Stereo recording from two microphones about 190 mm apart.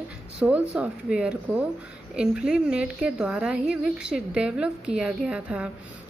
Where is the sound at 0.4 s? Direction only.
5° right (ahead or behind).